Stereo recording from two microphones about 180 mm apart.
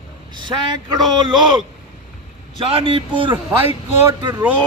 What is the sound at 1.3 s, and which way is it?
A man's voice, 25° right (ahead or behind).